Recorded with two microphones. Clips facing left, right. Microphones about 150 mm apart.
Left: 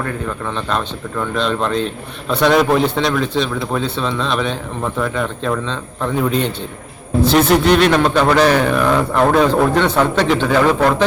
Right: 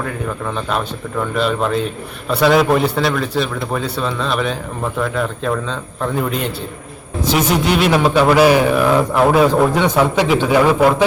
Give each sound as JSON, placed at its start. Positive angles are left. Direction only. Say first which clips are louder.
{"t": 0.0, "sound": "a man's voice", "louder": "even", "side_deg": -5}